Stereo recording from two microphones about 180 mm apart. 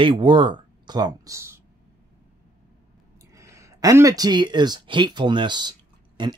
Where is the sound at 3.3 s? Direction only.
15° right (ahead or behind).